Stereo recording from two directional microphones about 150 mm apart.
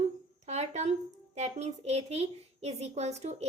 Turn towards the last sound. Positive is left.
turn(degrees=-45)  # may be behind; listen again after turning